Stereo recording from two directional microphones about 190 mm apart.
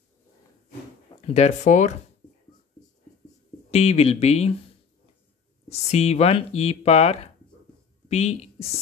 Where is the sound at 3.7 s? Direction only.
35° left (ahead or behind).